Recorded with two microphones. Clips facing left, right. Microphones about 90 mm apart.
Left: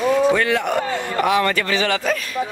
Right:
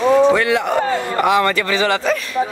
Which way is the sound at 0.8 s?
35° right (ahead or behind).